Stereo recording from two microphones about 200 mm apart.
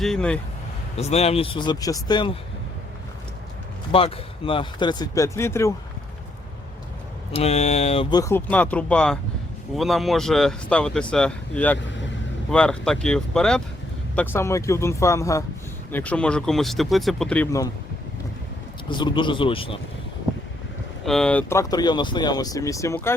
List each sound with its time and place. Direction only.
0.0 s speech: 5° left (ahead or behind)
0.9 s speech: 30° left (ahead or behind)
3.9 s speech: 25° left (ahead or behind)
7.3 s speech: 35° left (ahead or behind)
8.1 s speech: 15° left (ahead or behind)
18.9 s speech: 25° left (ahead or behind)
21.0 s speech: centre (ahead or behind)